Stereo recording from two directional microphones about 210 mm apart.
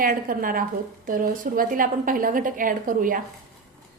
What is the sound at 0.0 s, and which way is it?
A woman's voice, 40° right (ahead or behind).